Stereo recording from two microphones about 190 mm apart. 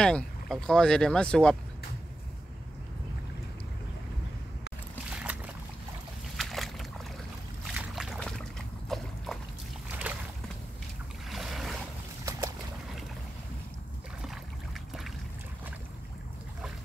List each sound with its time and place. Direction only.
0.0 s speech: 5° left (ahead or behind)
5.1 s boat: 5° right (ahead or behind)
10.1 s a sound: 10° right (ahead or behind)
11.2 s boat: centre (ahead or behind)
12.3 s boat: 15° right (ahead or behind)
14.2 s boat: centre (ahead or behind)